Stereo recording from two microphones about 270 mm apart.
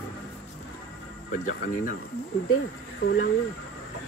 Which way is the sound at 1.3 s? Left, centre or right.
Left.